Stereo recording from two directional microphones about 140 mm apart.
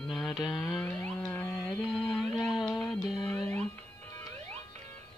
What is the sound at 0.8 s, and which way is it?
Music, 10° left (ahead or behind).